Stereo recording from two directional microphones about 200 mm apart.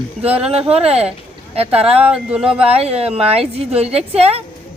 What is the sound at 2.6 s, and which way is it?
A woman's voice, 30° right (ahead or behind).